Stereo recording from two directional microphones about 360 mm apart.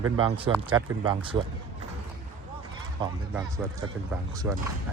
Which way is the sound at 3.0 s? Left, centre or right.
Centre.